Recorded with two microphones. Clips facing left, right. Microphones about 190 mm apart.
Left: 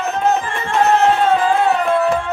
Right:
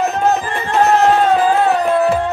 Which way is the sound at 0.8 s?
35° right (ahead or behind).